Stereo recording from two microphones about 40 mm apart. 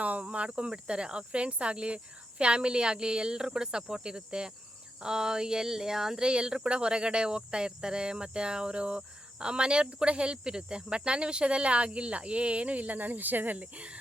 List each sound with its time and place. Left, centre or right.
0.0 s speech: right